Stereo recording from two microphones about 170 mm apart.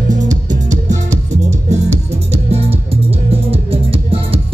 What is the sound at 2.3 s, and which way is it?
Music, 35° right (ahead or behind).